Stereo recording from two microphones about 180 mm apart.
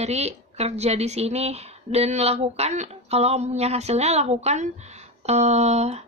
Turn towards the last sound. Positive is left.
turn(degrees=-35)  # may be behind; listen again after turning